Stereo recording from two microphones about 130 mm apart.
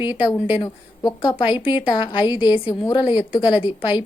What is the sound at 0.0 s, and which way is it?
A woman's voice, 40° left (ahead or behind).